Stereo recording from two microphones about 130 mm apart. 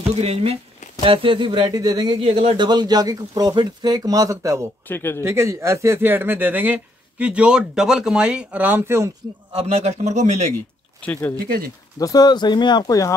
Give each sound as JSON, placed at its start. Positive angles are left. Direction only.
{"t": 0.1, "sound": "speech", "side_deg": -50}
{"t": 1.7, "sound": "speech", "side_deg": -30}
{"t": 2.2, "sound": "speech", "side_deg": -50}
{"t": 2.5, "sound": "speech", "side_deg": -35}
{"t": 4.8, "sound": "speech", "side_deg": 15}
{"t": 5.2, "sound": "speech", "side_deg": -20}
{"t": 9.5, "sound": "a man's voice", "side_deg": -50}
{"t": 11.0, "sound": "speech", "side_deg": 15}
{"t": 12.0, "sound": "speech", "side_deg": 30}